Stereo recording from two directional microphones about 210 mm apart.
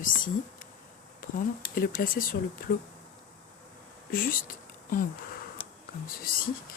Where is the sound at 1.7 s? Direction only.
45° left (ahead or behind).